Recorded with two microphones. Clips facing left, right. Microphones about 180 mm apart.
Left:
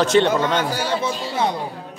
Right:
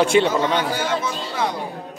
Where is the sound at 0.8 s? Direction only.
25° left (ahead or behind).